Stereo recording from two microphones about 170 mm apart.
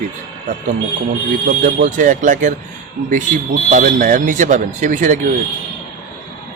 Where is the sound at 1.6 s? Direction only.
50° right (ahead or behind).